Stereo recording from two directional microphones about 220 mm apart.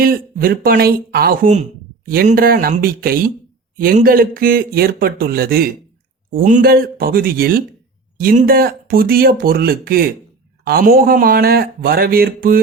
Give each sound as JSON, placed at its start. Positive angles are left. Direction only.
{"t": 0.0, "sound": "a man's voice", "side_deg": -40}